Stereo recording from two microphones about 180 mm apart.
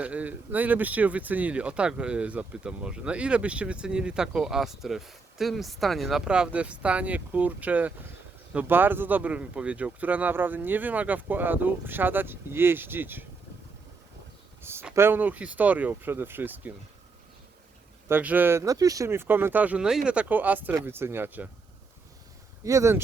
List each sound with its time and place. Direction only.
0.0 s speech: 10° right (ahead or behind)
14.6 s speech: 15° right (ahead or behind)
18.1 s speech: 10° right (ahead or behind)
22.6 s speech: 15° right (ahead or behind)